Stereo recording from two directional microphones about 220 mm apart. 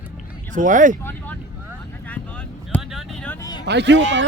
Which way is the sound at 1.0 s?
10° left (ahead or behind).